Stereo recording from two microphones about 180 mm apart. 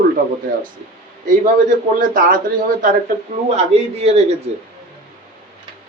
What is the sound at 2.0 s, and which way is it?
Speech, 50° right (ahead or behind).